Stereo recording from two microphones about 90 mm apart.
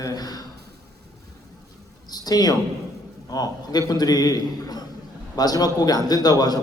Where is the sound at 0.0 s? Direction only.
45° left (ahead or behind).